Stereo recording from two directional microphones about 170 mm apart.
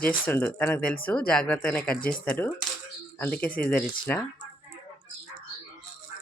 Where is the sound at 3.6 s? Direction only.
10° left (ahead or behind).